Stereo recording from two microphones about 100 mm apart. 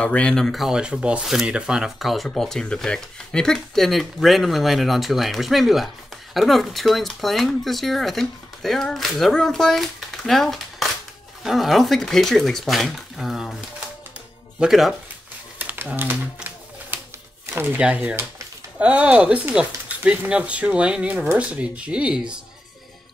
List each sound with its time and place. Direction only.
0.0 s speech: 10° left (ahead or behind); by 13.6 s 5° right (ahead or behind)
14.6 s speech: centre (ahead or behind)
15.6 s typewriter: 15° right (ahead or behind)
17.5 s speech: 20° right (ahead or behind)
17.7 s speech: 10° right (ahead or behind)